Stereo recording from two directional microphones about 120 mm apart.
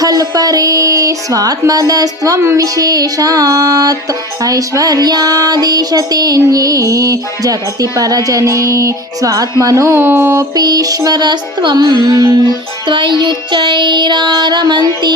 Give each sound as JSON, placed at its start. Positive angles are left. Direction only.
{"t": 0.0, "sound": "music", "side_deg": -30}
{"t": 4.4, "sound": "child singing", "side_deg": -30}
{"t": 10.5, "sound": "music", "side_deg": -35}